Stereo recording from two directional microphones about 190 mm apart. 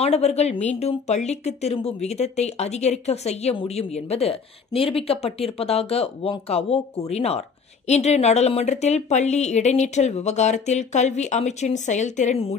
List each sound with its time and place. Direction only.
0.0 s speech: 35° left (ahead or behind)